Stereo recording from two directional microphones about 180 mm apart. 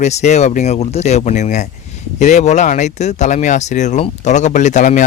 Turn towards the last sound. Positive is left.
turn(degrees=45)  # may be behind; listen again after turning